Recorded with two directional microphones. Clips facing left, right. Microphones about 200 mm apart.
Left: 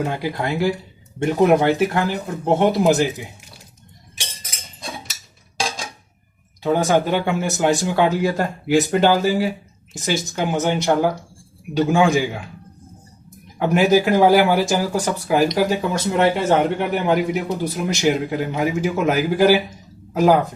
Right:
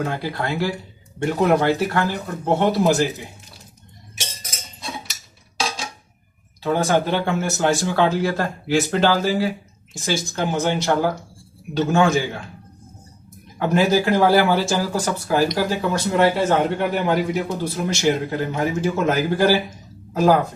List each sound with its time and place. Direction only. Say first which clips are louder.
0.0 s a man's voice: left 2 dB; 15° left (ahead or behind)
6.6 s a man's voice: left 2 dB; 15° left (ahead or behind)
13.6 s a man's voice: left 2 dB; 15° left (ahead or behind)